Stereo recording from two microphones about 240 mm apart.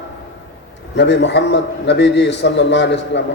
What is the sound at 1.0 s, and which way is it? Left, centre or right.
A man's voice, left.